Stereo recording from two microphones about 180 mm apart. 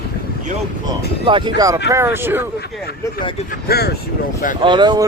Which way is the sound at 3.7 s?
60° left (ahead or behind).